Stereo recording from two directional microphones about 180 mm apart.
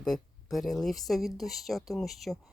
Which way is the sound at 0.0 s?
Centre (ahead or behind).